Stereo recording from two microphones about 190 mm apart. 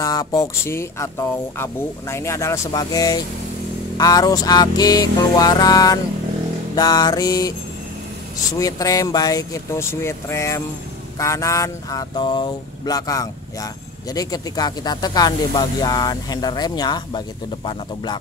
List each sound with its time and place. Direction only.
0.0 s speech: 20° left (ahead or behind)
8.5 s speech: 20° left (ahead or behind)